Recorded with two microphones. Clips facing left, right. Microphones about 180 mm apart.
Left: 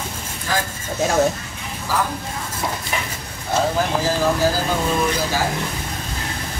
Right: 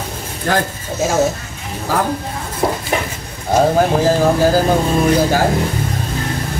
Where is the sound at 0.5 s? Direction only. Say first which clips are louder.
Right 7 dB; 60° right (ahead or behind).